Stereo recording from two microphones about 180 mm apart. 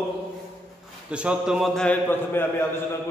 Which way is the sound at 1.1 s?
5° right (ahead or behind).